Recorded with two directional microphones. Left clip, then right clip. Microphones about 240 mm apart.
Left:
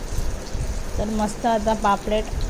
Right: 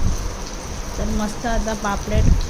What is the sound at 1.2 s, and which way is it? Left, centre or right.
A woman's voice, centre.